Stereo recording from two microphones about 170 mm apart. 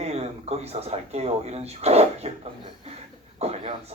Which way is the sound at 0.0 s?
40° right (ahead or behind).